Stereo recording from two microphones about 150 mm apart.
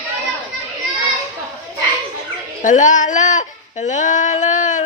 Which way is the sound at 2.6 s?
55° left (ahead or behind).